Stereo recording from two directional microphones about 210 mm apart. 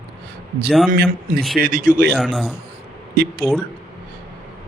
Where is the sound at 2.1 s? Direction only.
Centre (ahead or behind).